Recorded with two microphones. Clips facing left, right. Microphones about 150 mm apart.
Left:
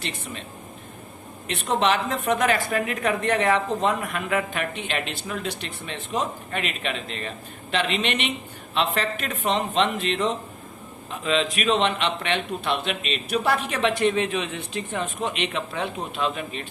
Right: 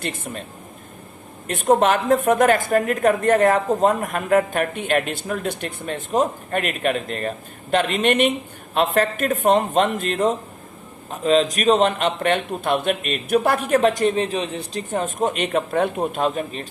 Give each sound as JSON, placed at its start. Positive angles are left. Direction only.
{"t": 0.0, "sound": "speech", "side_deg": -50}
{"t": 1.5, "sound": "speech", "side_deg": -45}